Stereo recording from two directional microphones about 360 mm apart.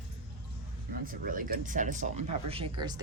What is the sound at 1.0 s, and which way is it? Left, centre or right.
Speech, right.